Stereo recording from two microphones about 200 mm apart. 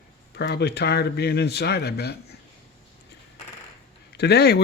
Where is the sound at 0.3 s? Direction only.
55° left (ahead or behind).